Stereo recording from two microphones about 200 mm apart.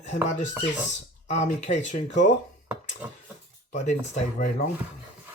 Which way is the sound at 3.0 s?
10° right (ahead or behind).